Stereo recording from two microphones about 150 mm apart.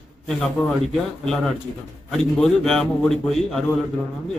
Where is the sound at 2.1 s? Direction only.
5° left (ahead or behind).